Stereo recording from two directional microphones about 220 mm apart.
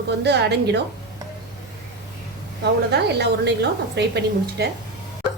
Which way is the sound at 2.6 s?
50° right (ahead or behind).